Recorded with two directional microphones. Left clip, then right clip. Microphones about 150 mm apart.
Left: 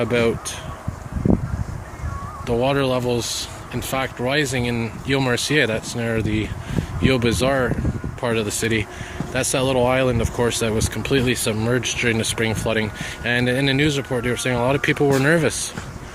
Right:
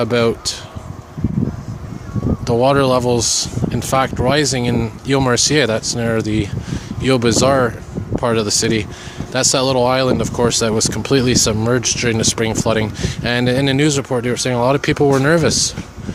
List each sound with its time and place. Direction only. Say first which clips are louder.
0.0 s speech: right 4 dB; 30° right (ahead or behind)
2.5 s speech: right 6 dB; 40° right (ahead or behind)